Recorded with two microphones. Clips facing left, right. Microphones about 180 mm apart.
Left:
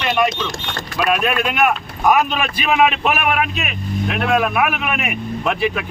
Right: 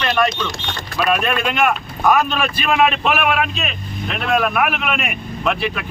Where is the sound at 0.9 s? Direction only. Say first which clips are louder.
Even; 5° left (ahead or behind).